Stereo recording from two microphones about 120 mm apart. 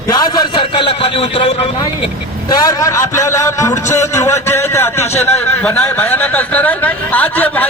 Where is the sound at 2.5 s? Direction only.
30° left (ahead or behind).